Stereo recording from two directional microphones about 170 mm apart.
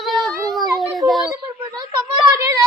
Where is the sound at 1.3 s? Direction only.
25° right (ahead or behind).